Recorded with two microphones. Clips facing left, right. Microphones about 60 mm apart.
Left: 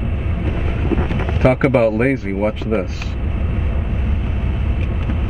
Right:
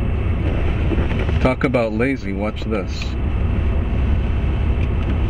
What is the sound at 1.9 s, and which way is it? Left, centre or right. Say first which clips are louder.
Speech: left 2 dB; centre.